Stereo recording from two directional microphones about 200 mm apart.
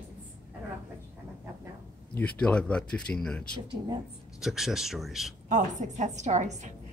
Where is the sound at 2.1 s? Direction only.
5° left (ahead or behind).